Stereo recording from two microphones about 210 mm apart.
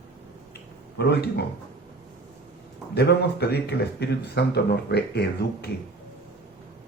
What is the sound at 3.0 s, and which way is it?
Speech, 50° left (ahead or behind).